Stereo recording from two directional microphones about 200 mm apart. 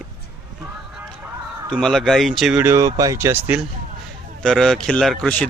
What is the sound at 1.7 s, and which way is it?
Speech, centre (ahead or behind).